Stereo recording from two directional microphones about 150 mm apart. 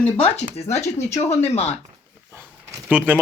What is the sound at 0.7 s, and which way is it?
Speech, 45° left (ahead or behind).